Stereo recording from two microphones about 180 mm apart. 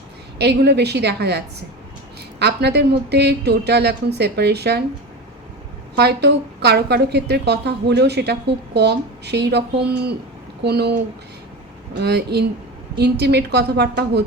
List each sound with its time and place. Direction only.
0.3 s a woman's voice: 65° right (ahead or behind)
2.4 s a woman's voice: 65° right (ahead or behind)
6.0 s a woman's voice: 65° right (ahead or behind)
11.9 s a woman's voice: 65° right (ahead or behind)